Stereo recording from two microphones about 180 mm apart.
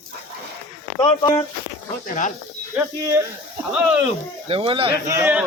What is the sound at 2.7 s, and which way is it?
A man's voice, 15° right (ahead or behind).